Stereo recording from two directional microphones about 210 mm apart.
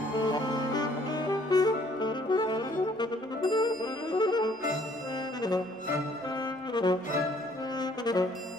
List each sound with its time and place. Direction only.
0.2 s saxophone: 20° left (ahead or behind)
6.7 s music: 20° left (ahead or behind)
7.8 s brass instrument: 20° left (ahead or behind)